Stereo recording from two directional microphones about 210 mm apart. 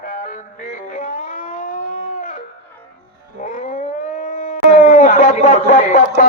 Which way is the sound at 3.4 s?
40° left (ahead or behind).